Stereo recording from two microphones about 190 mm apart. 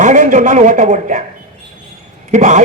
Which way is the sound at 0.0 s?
40° right (ahead or behind).